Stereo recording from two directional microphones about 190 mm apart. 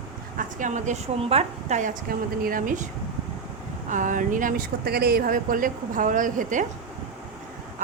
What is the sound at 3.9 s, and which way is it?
Speech, 45° right (ahead or behind).